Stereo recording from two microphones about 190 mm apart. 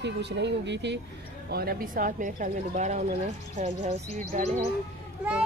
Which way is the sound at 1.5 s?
55° right (ahead or behind).